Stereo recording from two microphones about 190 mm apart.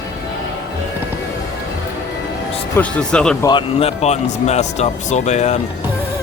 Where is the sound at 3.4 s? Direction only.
25° left (ahead or behind).